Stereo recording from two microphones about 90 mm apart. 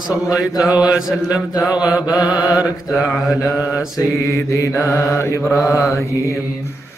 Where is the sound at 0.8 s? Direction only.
5° right (ahead or behind).